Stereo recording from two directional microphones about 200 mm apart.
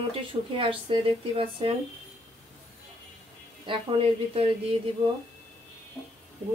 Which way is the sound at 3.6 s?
30° right (ahead or behind).